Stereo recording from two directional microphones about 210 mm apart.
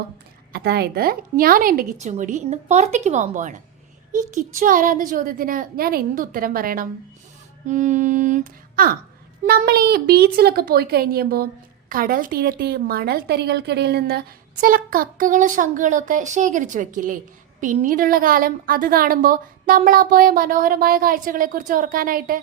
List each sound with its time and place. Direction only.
0.5 s a woman's voice: 50° right (ahead or behind)